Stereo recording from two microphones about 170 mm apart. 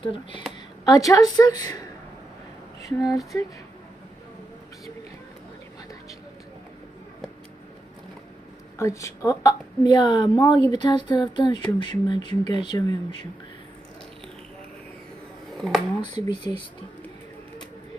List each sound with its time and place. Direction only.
0.1 s a woman's voice: 30° left (ahead or behind)
0.9 s a woman's voice: 20° left (ahead or behind)
8.8 s a woman's voice: 15° left (ahead or behind)
15.5 s speech: centre (ahead or behind)
16.0 s a woman's voice: 25° left (ahead or behind)